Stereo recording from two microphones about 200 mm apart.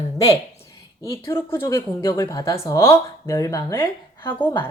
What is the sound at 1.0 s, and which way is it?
A woman's voice, 15° left (ahead or behind).